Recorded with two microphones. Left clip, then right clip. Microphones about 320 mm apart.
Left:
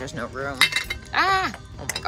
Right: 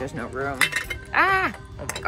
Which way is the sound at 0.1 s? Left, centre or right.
Centre.